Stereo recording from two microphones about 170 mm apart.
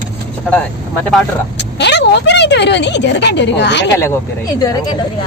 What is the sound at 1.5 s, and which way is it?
A woman's voice, 90° left.